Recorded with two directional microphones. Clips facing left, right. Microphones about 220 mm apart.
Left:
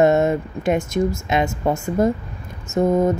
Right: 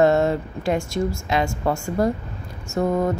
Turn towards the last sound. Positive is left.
turn(degrees=20)  # may be behind; listen again after turning